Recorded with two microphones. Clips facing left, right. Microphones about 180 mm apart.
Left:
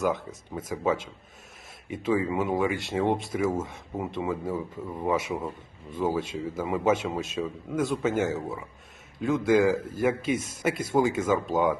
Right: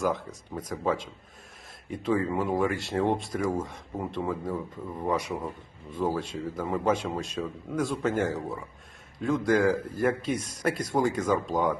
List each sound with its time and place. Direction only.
0.0 s speech: centre (ahead or behind)
9.7 s speech: 25° left (ahead or behind)
10.0 s speech: 5° left (ahead or behind)